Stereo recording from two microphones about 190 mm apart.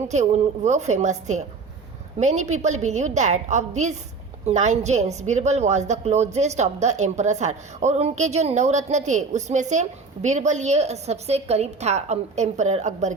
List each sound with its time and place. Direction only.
0.1 s a woman's voice: 35° right (ahead or behind)